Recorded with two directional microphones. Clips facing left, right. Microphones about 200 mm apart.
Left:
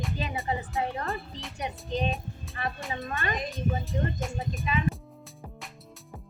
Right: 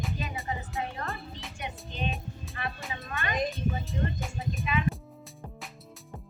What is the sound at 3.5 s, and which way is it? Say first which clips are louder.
Speech: left 2 dB; centre (ahead or behind).